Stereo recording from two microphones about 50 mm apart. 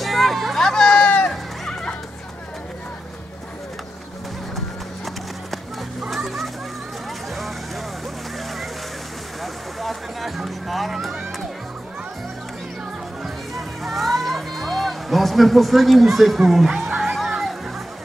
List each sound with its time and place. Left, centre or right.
0.0 s music: centre
0.6 s run: centre
1.0 s a sound: left
6.0 s music: centre
9.4 s music: centre
13.6 s a sound: centre
17.1 s music: centre